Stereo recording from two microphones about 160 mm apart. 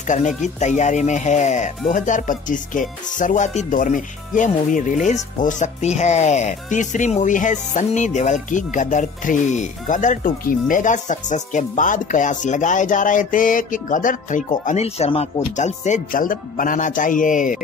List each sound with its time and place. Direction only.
0.0 s speech: 50° left (ahead or behind)